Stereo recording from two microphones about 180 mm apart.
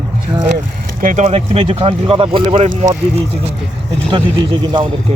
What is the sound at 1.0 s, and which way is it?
Speech, 40° right (ahead or behind).